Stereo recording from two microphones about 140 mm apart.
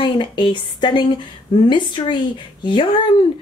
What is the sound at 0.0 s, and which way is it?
A woman's voice, 35° left (ahead or behind).